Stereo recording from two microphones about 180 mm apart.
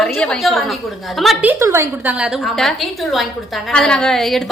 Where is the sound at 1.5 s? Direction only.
15° right (ahead or behind).